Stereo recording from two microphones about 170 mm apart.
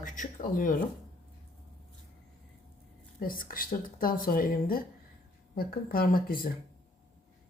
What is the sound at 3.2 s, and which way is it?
Speech, 55° left (ahead or behind).